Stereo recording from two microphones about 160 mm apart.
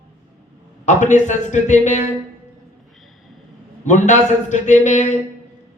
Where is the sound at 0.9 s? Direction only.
50° left (ahead or behind).